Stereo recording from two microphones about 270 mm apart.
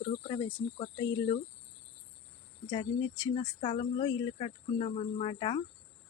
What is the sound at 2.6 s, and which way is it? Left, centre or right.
Speech, centre.